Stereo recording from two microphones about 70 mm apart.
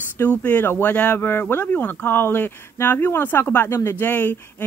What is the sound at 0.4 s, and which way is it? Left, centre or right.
Speech, left.